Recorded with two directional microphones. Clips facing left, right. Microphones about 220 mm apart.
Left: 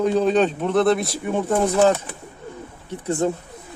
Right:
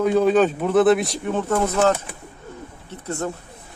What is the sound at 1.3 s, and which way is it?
Speech, 15° left (ahead or behind).